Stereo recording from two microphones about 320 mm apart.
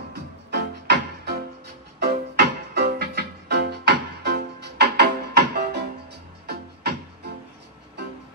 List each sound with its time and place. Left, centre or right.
0.1 s music: right